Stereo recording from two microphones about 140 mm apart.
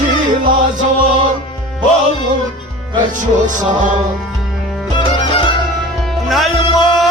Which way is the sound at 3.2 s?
65° right (ahead or behind).